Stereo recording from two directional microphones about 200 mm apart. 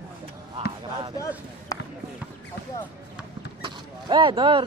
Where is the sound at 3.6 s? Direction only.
25° right (ahead or behind).